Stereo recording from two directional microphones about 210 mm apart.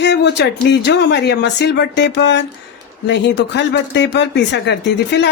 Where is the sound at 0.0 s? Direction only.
55° left (ahead or behind).